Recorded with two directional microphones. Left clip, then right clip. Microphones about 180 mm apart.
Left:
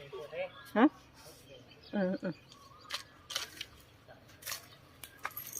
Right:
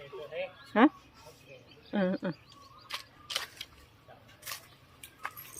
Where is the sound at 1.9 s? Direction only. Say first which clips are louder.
Right 3 dB; 15° right (ahead or behind).